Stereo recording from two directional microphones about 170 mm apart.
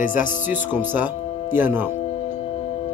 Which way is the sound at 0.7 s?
10° right (ahead or behind).